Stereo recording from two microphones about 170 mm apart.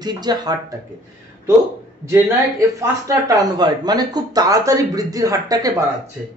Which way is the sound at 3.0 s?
20° right (ahead or behind).